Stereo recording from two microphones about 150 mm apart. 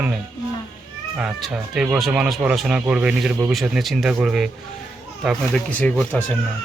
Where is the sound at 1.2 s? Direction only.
5° right (ahead or behind).